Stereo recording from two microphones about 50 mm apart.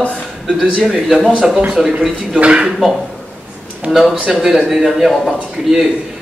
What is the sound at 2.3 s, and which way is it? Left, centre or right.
Speech, right.